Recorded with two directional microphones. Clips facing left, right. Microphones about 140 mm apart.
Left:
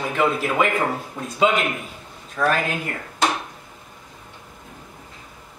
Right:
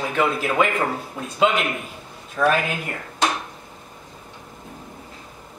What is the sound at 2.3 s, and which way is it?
Speech, 5° right (ahead or behind).